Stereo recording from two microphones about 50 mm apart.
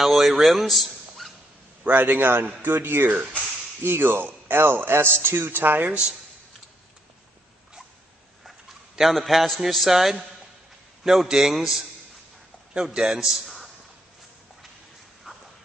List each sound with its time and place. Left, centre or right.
0.0 s a man's voice: centre
1.9 s a man's voice: right
5.6 s a man's voice: right
8.9 s a man's voice: centre
12.9 s a man's voice: centre
15.3 s dog: centre